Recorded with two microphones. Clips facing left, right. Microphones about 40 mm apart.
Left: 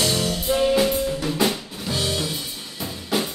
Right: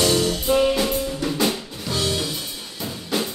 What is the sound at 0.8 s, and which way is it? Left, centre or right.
Drum kit, centre.